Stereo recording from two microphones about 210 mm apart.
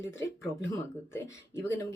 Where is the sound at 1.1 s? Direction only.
15° left (ahead or behind).